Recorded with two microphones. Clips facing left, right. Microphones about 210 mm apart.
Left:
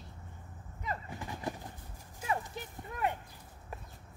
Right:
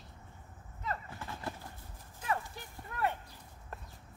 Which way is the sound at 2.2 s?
20° left (ahead or behind).